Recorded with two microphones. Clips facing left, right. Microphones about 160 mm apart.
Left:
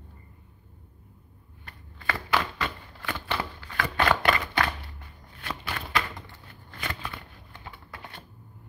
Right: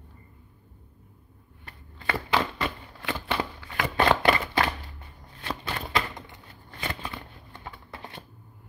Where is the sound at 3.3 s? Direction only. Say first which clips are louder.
Right 2 dB; 15° right (ahead or behind).